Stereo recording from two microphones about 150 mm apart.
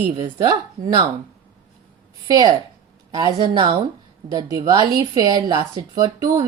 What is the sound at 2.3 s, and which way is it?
A woman's voice, 25° right (ahead or behind).